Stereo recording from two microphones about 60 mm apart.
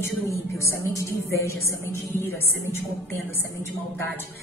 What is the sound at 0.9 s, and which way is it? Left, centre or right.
A woman's voice, left.